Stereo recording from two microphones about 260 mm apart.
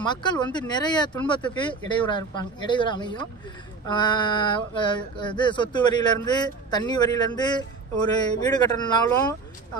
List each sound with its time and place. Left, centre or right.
0.0 s speech: centre